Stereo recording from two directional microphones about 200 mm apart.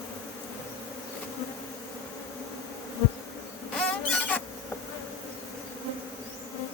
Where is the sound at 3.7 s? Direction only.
5° left (ahead or behind).